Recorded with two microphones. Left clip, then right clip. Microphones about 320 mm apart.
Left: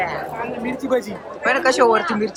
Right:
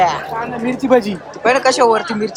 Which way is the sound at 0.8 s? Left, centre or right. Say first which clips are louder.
Right 9 dB; centre.